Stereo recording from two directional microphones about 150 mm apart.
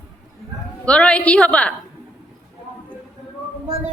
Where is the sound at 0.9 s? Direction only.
5° left (ahead or behind).